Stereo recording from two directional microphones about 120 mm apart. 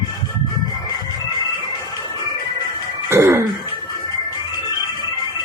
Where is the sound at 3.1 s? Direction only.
20° right (ahead or behind).